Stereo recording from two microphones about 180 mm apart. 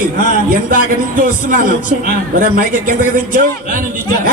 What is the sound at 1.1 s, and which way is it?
A man's voice, 50° right (ahead or behind).